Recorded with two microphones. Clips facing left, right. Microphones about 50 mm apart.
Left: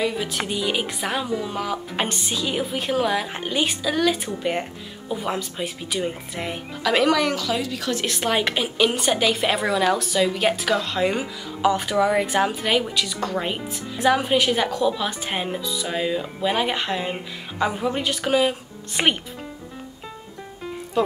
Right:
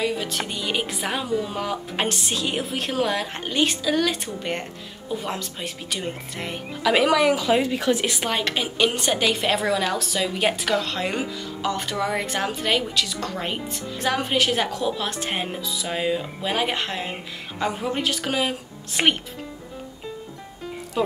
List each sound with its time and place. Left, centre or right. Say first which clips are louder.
0.0 s speech: left 1 dB; centre
7.3 s a woman's voice: right 4 dB; right
7.9 s speech: left 4 dB; centre